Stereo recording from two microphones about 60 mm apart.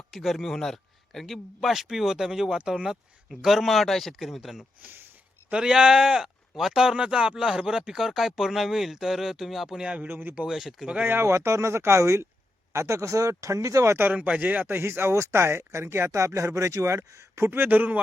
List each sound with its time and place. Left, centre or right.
0.1 s speech: centre
10.0 s speech: right
10.3 s speech: centre
11.0 s speech: right
14.1 s speech: right
15.1 s speech: right
17.5 s speech: right